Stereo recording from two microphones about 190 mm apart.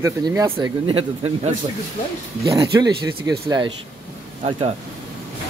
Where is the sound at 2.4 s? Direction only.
20° right (ahead or behind).